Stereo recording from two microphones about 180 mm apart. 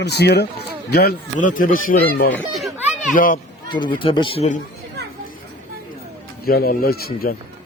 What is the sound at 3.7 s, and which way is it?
Speech, 25° left (ahead or behind).